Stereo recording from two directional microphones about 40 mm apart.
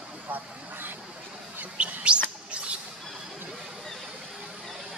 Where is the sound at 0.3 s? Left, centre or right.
Right.